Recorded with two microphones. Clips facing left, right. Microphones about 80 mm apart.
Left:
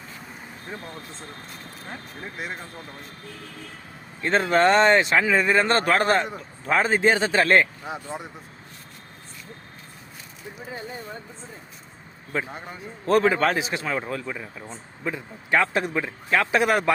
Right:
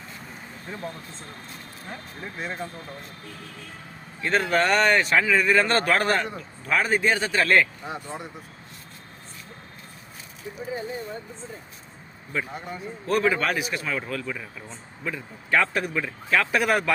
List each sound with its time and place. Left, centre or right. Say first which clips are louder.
2.2 s speech: right 2 dB; centre
4.2 s speech: left 3 dB; left
12.3 s speech: left 1 dB; left
13.1 s a man's voice: left 4 dB; left